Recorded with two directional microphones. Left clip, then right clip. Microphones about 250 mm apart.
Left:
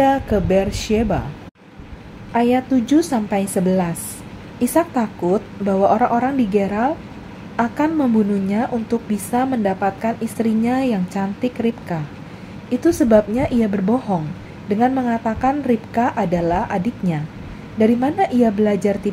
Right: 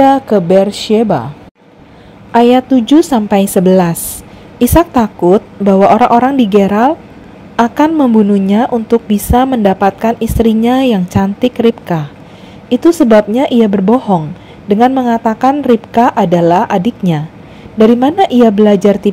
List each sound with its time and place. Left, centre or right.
0.0 s a woman's voice: right
2.3 s a woman's voice: right